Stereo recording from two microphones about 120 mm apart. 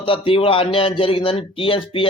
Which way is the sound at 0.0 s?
50° left (ahead or behind).